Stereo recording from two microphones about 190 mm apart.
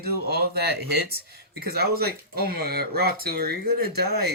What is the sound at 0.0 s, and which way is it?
Speech, 55° right (ahead or behind).